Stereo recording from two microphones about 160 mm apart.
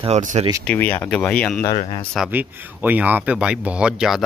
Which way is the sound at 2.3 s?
10° right (ahead or behind).